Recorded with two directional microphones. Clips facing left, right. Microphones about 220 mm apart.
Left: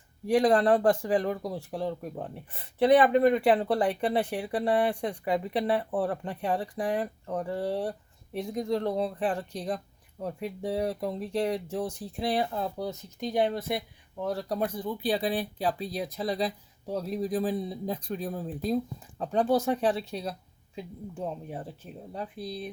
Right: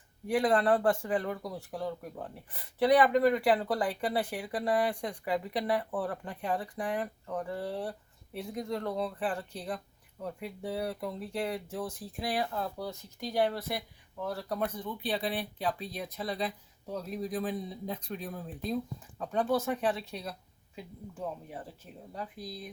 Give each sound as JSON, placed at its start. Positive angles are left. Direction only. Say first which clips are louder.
{"t": 0.3, "sound": "speech", "louder": "left 4 dB", "side_deg": 30}
{"t": 22.1, "sound": "speech", "louder": "left 5 dB", "side_deg": 30}